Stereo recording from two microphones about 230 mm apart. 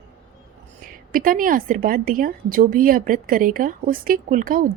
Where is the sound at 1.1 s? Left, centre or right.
Right.